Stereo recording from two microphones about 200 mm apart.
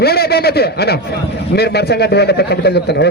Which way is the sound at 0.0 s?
50° left (ahead or behind).